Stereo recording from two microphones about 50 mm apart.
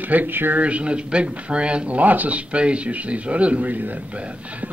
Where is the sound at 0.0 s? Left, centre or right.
Right.